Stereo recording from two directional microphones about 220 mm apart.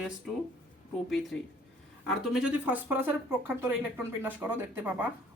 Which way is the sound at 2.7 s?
10° right (ahead or behind).